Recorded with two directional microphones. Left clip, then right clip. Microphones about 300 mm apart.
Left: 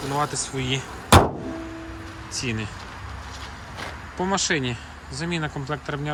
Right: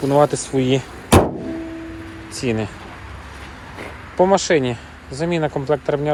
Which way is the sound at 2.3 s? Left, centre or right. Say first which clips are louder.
Right 7 dB; centre.